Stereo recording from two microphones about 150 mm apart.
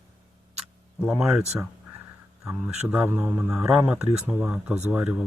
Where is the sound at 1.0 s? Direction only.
5° right (ahead or behind).